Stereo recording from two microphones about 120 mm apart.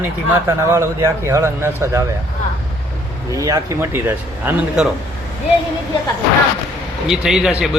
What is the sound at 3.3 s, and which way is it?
A man's voice, 25° right (ahead or behind).